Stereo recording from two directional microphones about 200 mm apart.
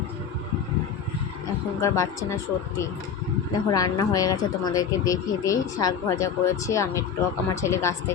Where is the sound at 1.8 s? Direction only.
15° left (ahead or behind).